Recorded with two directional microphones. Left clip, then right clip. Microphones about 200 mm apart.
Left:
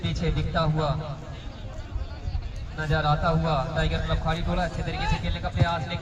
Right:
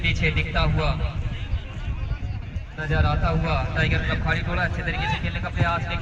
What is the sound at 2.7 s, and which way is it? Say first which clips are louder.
A man's voice: left 1 dB; 40° left (ahead or behind).